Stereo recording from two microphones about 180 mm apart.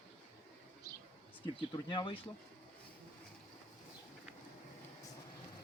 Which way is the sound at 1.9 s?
25° left (ahead or behind).